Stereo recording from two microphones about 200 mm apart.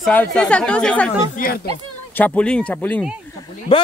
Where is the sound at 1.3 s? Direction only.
45° left (ahead or behind).